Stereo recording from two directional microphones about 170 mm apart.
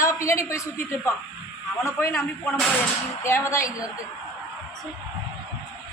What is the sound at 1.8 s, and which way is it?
A woman's voice, 15° left (ahead or behind).